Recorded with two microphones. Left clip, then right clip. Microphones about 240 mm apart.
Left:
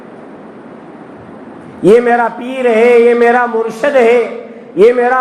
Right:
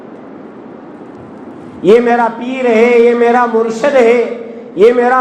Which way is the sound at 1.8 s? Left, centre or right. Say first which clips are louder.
Even; left.